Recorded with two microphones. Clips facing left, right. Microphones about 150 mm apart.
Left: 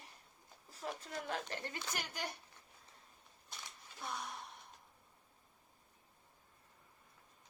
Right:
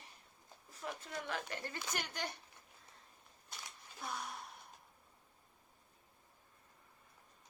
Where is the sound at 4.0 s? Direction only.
Centre (ahead or behind).